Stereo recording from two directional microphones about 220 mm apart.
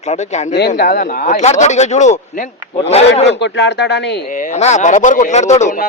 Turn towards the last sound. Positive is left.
turn(degrees=35)  # may be behind; listen again after turning